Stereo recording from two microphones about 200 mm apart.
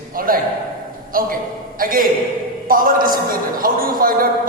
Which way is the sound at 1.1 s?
45° right (ahead or behind).